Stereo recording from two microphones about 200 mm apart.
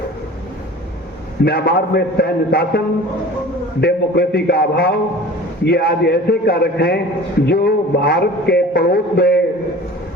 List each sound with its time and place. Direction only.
1.5 s a man's voice: 55° left (ahead or behind)